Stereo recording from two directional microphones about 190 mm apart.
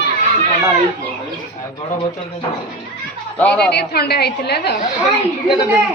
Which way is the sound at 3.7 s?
60° left (ahead or behind).